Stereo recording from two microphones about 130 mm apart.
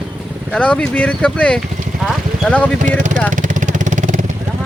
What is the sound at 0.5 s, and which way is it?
Speech, 10° left (ahead or behind).